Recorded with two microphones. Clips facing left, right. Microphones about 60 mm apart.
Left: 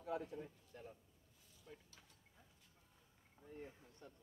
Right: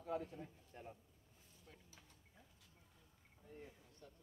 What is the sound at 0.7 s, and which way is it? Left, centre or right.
Speech, right.